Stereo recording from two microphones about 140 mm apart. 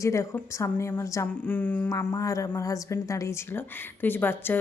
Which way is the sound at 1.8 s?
25° left (ahead or behind).